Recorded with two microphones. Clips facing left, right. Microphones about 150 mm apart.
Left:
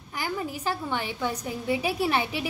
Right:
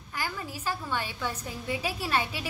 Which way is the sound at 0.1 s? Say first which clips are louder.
Left 4 dB; 15° left (ahead or behind).